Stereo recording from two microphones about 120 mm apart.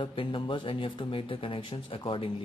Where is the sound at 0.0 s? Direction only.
45° left (ahead or behind).